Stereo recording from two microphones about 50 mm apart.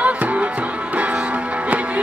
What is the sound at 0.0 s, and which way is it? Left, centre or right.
Music, right.